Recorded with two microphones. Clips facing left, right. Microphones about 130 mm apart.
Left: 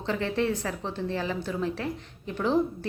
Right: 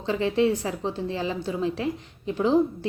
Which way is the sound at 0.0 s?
15° right (ahead or behind).